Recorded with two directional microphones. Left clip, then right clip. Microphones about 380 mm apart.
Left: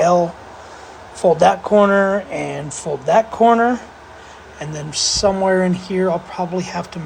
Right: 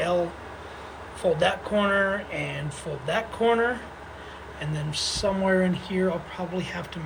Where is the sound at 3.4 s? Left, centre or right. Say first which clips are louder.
Left 7 dB; centre.